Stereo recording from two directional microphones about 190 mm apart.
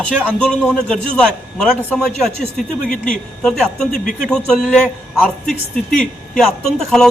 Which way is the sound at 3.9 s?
45° left (ahead or behind).